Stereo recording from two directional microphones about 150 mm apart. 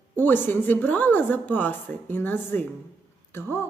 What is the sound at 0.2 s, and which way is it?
Speech, 15° left (ahead or behind).